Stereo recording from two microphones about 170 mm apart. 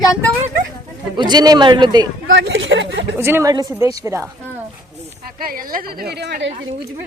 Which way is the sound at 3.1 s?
15° right (ahead or behind).